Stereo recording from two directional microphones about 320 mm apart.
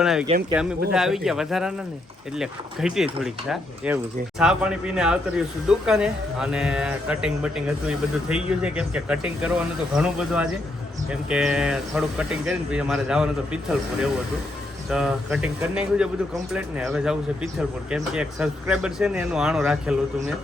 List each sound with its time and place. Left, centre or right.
0.0 s a man's voice: centre